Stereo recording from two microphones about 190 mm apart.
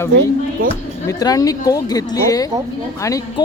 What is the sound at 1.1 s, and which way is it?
Speech, 20° left (ahead or behind).